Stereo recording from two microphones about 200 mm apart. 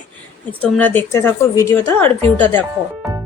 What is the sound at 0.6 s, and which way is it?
A woman's voice, 10° left (ahead or behind).